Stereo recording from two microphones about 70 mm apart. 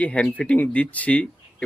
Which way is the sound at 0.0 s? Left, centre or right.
Centre.